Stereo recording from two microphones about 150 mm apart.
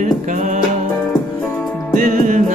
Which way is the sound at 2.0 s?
55° right (ahead or behind).